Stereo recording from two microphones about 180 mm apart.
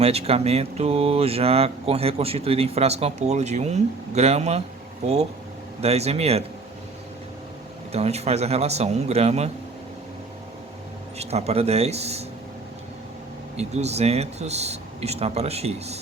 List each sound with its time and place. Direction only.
0.0 s speech: 35° right (ahead or behind)
5.8 s speech: 35° right (ahead or behind)
7.9 s speech: 35° right (ahead or behind)
11.2 s speech: 35° right (ahead or behind)
13.6 s speech: 35° right (ahead or behind)